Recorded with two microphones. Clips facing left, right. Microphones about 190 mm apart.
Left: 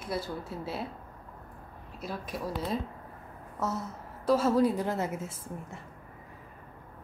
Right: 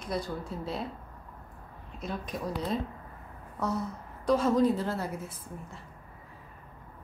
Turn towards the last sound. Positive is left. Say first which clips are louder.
# left 2 dB
turn(degrees=25)  # may be behind; listen again after turning